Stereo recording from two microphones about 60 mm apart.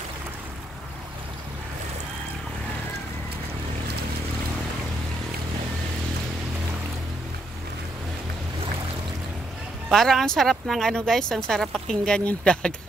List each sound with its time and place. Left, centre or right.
9.8 s speech: centre